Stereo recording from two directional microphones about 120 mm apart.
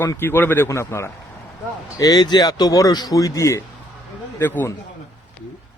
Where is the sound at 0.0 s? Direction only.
20° left (ahead or behind).